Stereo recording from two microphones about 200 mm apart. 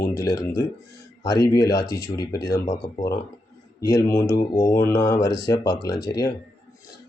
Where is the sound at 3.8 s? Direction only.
15° left (ahead or behind).